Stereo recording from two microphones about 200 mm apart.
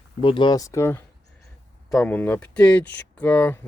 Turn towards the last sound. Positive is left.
turn(degrees=10)  # may be behind; listen again after turning